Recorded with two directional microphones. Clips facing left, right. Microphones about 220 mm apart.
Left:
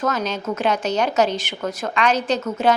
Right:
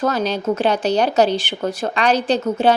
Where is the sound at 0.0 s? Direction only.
35° right (ahead or behind).